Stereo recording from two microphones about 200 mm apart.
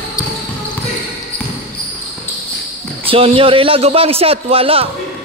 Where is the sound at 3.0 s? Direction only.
30° right (ahead or behind).